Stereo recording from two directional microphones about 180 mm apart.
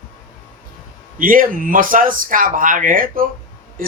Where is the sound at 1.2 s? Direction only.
50° right (ahead or behind).